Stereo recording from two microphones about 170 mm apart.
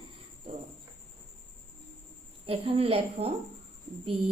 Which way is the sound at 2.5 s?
35° right (ahead or behind).